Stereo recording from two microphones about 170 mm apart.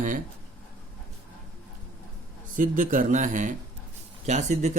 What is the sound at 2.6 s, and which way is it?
Speech, 50° right (ahead or behind).